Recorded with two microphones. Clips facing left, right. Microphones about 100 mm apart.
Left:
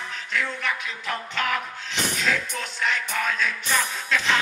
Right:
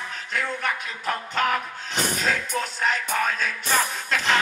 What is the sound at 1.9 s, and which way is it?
Music, 45° right (ahead or behind).